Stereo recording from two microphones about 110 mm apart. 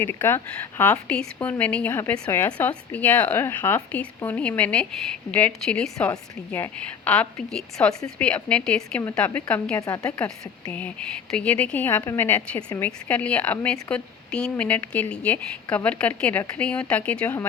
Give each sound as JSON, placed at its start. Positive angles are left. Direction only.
{"t": 0.0, "sound": "a woman's voice", "side_deg": 20}